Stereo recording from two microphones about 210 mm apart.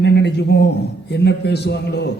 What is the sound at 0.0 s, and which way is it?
A man's voice, 55° left (ahead or behind).